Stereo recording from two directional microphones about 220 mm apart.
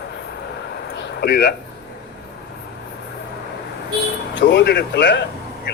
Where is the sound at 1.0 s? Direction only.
50° left (ahead or behind).